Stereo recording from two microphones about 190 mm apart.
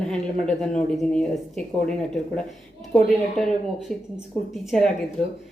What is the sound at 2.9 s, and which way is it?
A woman's voice, centre (ahead or behind).